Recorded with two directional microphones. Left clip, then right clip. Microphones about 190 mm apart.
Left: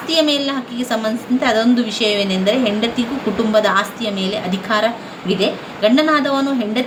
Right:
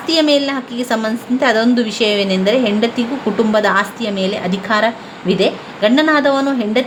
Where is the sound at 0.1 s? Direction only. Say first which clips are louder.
Right 3 dB; 35° right (ahead or behind).